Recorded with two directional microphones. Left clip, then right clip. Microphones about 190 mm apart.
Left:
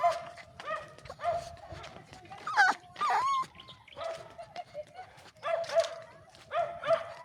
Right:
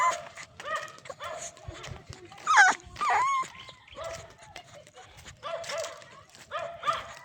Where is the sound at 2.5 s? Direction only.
25° right (ahead or behind).